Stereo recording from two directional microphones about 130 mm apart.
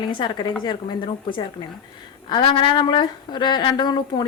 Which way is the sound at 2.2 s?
40° left (ahead or behind).